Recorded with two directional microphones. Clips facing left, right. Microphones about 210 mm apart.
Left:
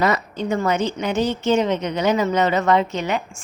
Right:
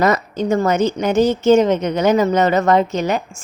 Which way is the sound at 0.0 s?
45° right (ahead or behind).